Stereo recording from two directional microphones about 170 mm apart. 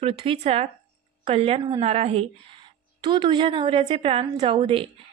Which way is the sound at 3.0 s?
25° right (ahead or behind).